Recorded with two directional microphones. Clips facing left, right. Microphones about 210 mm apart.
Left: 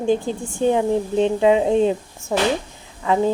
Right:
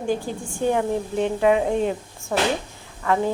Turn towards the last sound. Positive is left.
turn(degrees=15)  # may be behind; listen again after turning